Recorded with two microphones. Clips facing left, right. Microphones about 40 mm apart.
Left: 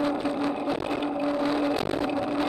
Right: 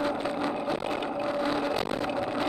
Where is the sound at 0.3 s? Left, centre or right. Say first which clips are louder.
Left 2 dB; centre.